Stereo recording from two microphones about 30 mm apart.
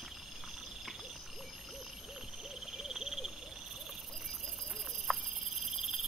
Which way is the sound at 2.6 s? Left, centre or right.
Centre.